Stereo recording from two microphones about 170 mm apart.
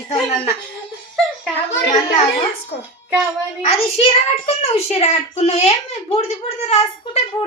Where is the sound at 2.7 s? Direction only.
75° left (ahead or behind).